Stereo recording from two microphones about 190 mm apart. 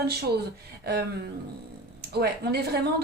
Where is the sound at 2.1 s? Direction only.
60° right (ahead or behind).